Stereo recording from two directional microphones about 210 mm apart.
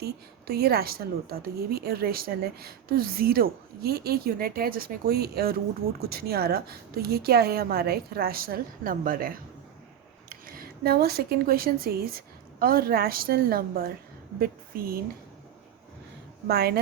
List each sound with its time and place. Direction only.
0.0 s a woman's voice: 50° right (ahead or behind)
16.5 s a woman's voice: 50° right (ahead or behind)